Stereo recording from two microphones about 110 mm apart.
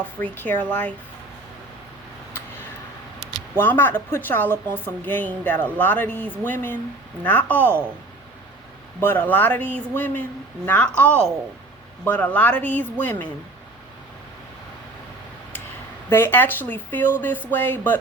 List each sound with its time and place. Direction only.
0.2 s a woman's voice: 15° left (ahead or behind)
3.5 s a woman's voice: 20° left (ahead or behind)
9.0 s a woman's voice: 20° left (ahead or behind)
16.0 s a woman's voice: 20° left (ahead or behind)